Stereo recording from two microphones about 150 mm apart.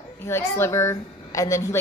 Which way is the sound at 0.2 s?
15° left (ahead or behind).